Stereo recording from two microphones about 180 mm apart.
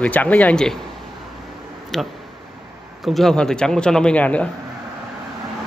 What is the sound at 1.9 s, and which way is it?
A man's voice, centre (ahead or behind).